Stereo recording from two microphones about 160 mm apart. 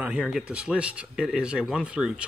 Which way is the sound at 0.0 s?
5° right (ahead or behind).